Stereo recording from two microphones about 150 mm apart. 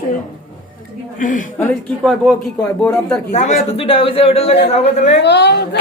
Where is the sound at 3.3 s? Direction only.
50° left (ahead or behind).